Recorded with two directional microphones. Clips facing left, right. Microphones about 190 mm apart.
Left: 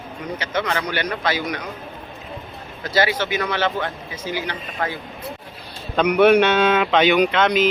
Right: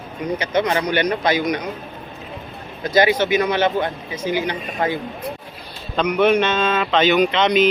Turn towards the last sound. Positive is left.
turn(degrees=5)  # may be behind; listen again after turning